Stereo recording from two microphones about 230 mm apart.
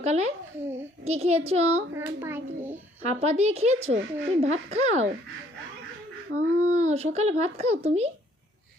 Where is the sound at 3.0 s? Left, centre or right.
Right.